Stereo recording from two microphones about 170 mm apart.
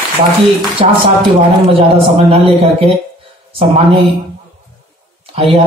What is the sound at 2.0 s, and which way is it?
A man's voice, 35° right (ahead or behind).